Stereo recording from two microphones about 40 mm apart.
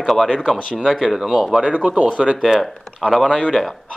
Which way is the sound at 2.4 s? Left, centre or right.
Centre.